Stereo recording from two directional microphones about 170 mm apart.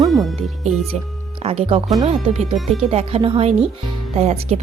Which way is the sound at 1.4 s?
35° right (ahead or behind).